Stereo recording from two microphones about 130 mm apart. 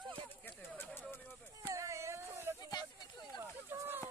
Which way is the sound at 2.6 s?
30° left (ahead or behind).